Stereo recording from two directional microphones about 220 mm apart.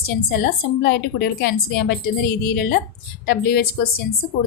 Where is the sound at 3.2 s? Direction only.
45° left (ahead or behind).